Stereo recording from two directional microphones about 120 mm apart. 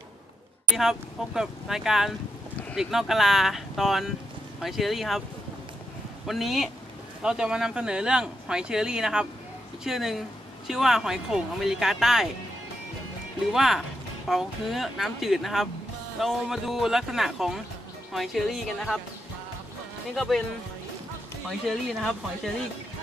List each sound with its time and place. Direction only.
0.7 s speech: 5° right (ahead or behind)
6.2 s speech: centre (ahead or behind)
13.5 s speech: centre (ahead or behind)
20.2 s speech: centre (ahead or behind)
21.5 s speech: centre (ahead or behind)